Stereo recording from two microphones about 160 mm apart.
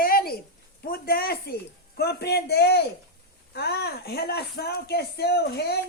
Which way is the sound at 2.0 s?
90° left.